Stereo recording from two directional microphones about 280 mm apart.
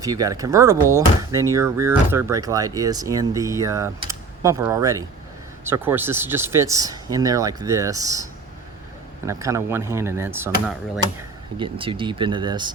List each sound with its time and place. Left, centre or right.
0.0 s speech: centre
11.5 s speech: centre